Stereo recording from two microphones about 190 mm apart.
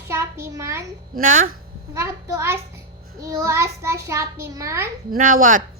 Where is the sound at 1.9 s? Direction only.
15° right (ahead or behind).